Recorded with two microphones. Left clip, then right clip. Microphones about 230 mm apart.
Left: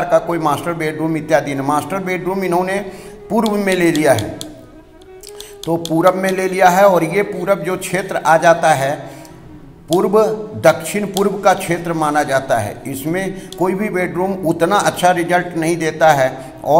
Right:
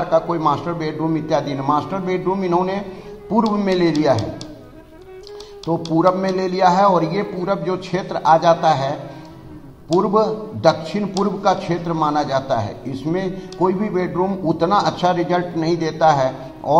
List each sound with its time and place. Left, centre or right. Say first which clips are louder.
0.1 s a man's voice: left 2 dB; left
5.9 s a man's voice: left 3 dB; left
9.9 s a man's voice: left 3 dB; left